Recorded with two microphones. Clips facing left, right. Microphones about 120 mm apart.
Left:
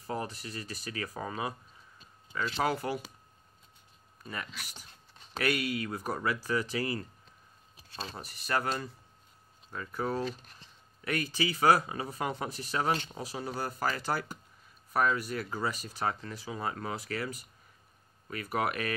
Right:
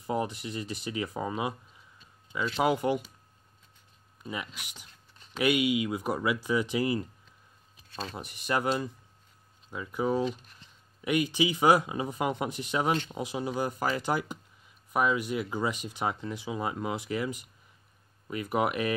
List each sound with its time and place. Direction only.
0.0 s speech: 20° right (ahead or behind)
2.5 s speech: 15° right (ahead or behind)
4.2 s speech: 10° right (ahead or behind)
8.5 s speech: 15° right (ahead or behind)